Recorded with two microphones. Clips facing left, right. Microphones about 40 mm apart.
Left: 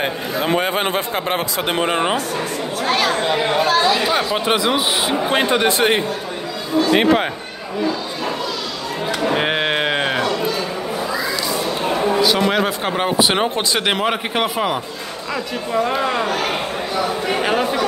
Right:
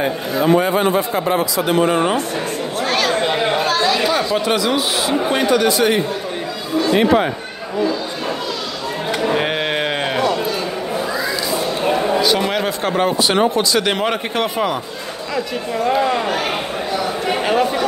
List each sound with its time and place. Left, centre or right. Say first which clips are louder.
0.0 s speech: right 3 dB; left
2.8 s speech: even; centre; by 7.2 s left
9.3 s a sound: left 2 dB; centre
12.0 s a man's voice: left 4 dB; centre
17.4 s a man's voice: right 2 dB; centre